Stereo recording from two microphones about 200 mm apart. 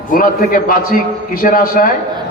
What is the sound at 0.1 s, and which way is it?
A man's voice, 45° left (ahead or behind).